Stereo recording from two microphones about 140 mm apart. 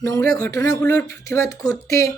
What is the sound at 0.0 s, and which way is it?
Speech, 20° left (ahead or behind).